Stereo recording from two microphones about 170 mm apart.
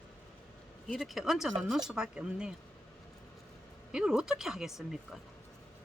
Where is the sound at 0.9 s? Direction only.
Centre (ahead or behind).